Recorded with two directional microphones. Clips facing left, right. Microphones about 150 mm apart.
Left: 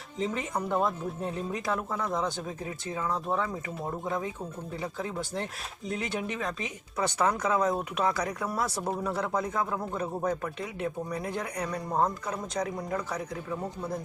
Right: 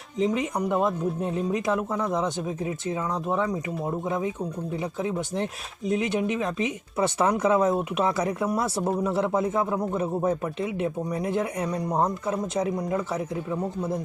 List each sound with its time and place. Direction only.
0.2 s speech: 15° right (ahead or behind)
5.9 s speech: 20° right (ahead or behind)